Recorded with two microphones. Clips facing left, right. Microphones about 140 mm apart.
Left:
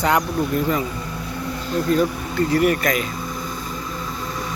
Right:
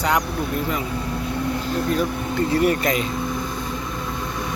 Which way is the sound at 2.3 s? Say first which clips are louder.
Left 1 dB; 25° right (ahead or behind).